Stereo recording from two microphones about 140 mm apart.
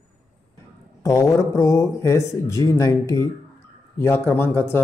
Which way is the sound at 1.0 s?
20° left (ahead or behind).